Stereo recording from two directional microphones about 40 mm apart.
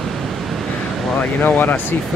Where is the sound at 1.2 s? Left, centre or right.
Left.